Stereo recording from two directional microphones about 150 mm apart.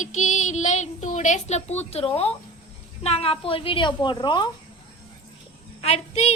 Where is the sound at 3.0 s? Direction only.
45° left (ahead or behind).